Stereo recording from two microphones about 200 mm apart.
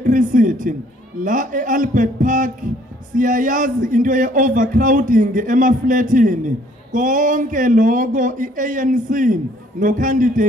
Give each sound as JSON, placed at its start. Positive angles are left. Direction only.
{"t": 0.0, "sound": "speech", "side_deg": -40}